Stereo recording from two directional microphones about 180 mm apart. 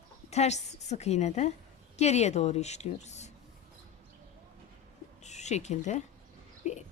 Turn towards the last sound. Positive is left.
turn(degrees=40)  # may be behind; listen again after turning